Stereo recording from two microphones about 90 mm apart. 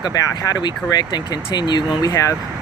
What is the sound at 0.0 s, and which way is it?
Speech, 45° left (ahead or behind).